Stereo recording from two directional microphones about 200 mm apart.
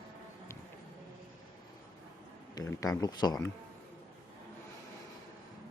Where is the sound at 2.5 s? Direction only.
15° left (ahead or behind).